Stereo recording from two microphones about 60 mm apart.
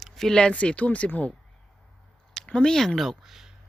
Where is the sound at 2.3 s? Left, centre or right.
Centre.